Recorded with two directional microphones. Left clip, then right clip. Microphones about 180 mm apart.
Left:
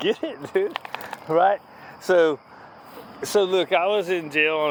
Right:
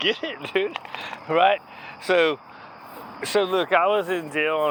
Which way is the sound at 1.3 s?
35° left (ahead or behind).